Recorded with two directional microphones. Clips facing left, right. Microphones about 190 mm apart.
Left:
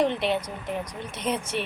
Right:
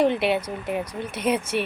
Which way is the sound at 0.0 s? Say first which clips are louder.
Right 3 dB; 10° right (ahead or behind).